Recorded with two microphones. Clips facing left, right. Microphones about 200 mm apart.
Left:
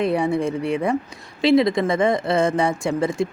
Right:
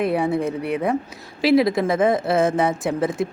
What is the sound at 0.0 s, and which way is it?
Speech, 5° right (ahead or behind).